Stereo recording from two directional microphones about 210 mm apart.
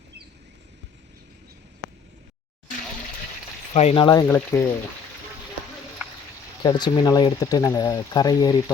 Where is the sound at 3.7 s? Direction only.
25° left (ahead or behind).